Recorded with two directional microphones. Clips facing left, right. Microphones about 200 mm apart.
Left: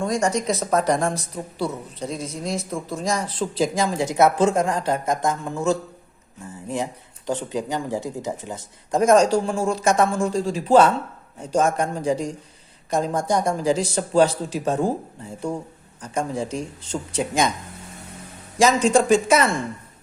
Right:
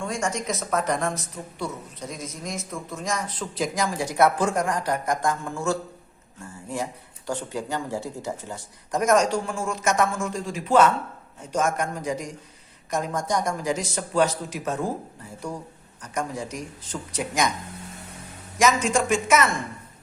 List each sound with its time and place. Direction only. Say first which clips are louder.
0.0 s speech: left 6 dB; 35° left (ahead or behind); by 5.7 s 20° left (ahead or behind)
7.3 s speech: left 4 dB; 20° left (ahead or behind)
16.0 s speech: left 4 dB; 30° left (ahead or behind)
18.6 s speech: left 5 dB; 35° left (ahead or behind)